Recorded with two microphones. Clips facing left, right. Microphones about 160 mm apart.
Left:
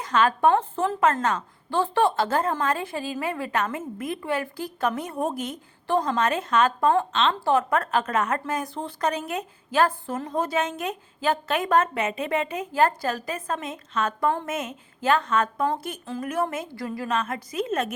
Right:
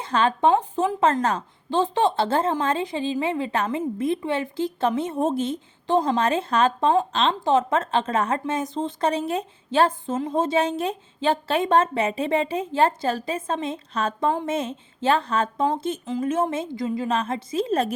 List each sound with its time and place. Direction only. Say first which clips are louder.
0.0 s a woman's voice: even; 30° right (ahead or behind)
0.5 s a woman's voice: right 2 dB; 15° right (ahead or behind)
1.2 s a woman's voice: right 2 dB; 35° right (ahead or behind)
1.7 s a woman's voice: right 1 dB; 20° right (ahead or behind)
7.1 s a woman's voice: right 1 dB; 35° right (ahead or behind)
7.3 s a woman's voice: right 2 dB; 20° right (ahead or behind)